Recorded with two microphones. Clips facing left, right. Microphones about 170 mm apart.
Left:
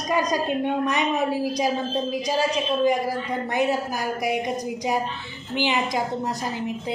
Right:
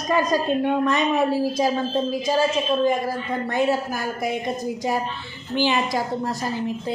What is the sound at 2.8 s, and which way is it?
A woman's voice, 15° left (ahead or behind).